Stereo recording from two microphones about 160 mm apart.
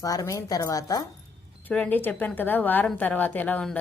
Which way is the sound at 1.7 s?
10° left (ahead or behind).